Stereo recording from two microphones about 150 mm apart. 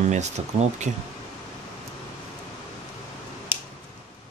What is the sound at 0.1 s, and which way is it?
Speech, 50° right (ahead or behind).